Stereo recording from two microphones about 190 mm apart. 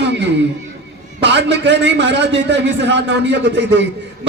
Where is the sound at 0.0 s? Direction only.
65° right (ahead or behind).